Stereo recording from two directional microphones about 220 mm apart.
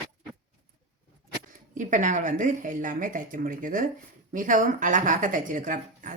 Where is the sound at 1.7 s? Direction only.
35° right (ahead or behind).